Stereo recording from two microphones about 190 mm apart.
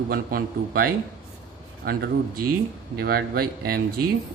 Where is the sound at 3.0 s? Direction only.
55° right (ahead or behind).